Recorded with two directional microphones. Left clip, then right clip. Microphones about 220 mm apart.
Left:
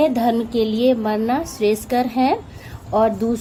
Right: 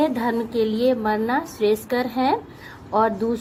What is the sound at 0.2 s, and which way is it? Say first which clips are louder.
A woman's voice: left 3 dB; 25° left (ahead or behind).